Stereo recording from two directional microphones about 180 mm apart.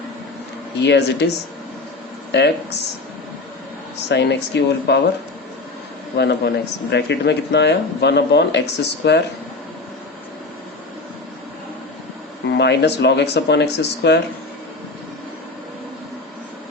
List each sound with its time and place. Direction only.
0.8 s speech: 70° left (ahead or behind)
2.3 s speech: 70° left (ahead or behind)
4.1 s speech: 75° left (ahead or behind)
6.1 s speech: 70° left (ahead or behind)
12.5 s speech: 70° left (ahead or behind)